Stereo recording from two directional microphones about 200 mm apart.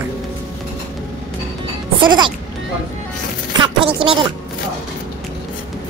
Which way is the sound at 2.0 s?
25° right (ahead or behind).